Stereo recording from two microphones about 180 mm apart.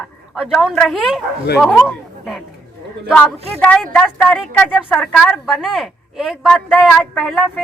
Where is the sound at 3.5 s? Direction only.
10° left (ahead or behind).